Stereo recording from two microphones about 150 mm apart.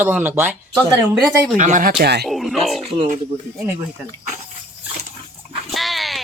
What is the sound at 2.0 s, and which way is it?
Speech, 90° right.